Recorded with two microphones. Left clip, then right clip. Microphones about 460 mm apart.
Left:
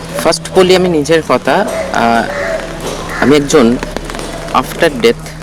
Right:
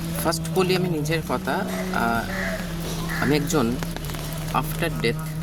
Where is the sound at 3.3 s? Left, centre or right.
Right.